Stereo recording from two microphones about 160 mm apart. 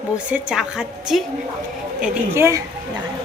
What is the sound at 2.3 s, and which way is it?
Speech, 15° right (ahead or behind).